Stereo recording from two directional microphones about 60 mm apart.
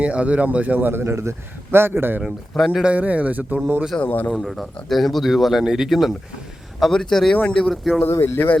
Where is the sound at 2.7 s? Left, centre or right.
Centre.